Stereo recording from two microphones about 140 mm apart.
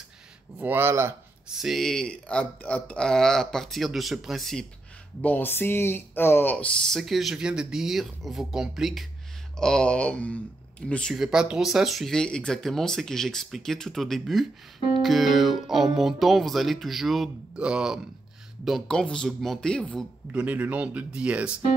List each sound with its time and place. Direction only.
0.6 s speech: 15° right (ahead or behind)
1.5 s speech: centre (ahead or behind)
5.2 s speech: 10° left (ahead or behind)
11.1 s speech: 5° right (ahead or behind)
20.3 s speech: 10° right (ahead or behind)